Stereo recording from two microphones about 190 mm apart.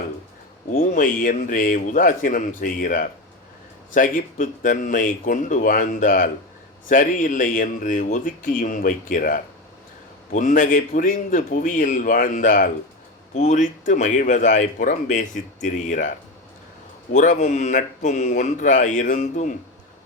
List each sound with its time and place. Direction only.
0.7 s speech: 45° left (ahead or behind)